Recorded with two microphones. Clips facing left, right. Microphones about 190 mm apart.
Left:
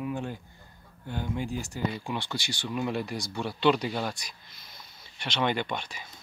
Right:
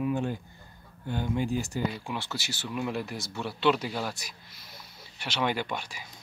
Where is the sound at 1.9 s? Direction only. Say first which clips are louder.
Left 2 dB; 5° right (ahead or behind).